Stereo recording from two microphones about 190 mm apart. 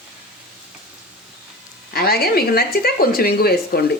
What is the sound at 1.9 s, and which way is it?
Speech, 55° left (ahead or behind).